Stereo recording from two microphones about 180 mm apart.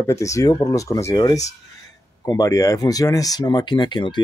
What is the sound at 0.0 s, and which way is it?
Speech, 15° left (ahead or behind).